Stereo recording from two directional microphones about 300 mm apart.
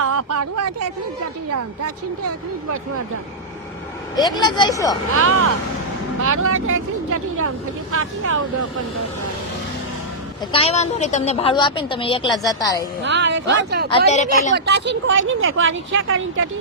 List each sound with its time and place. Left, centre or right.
0.0 s speech: right
4.2 s a woman's voice: centre
5.1 s speech: right
10.5 s a woman's voice: centre
13.0 s speech: right
13.9 s a woman's voice: left
14.5 s speech: right